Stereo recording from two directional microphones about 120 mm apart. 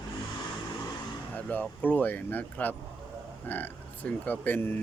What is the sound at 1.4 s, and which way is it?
Speech, 10° left (ahead or behind).